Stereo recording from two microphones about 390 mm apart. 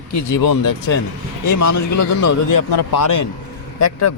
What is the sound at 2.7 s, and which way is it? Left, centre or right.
Speech, left.